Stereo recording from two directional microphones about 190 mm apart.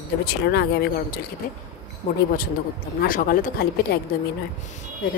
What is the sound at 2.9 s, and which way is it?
Speech, 50° left (ahead or behind).